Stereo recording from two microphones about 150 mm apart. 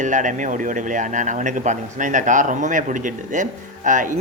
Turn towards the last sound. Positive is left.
turn(degrees=-60)  # may be behind; listen again after turning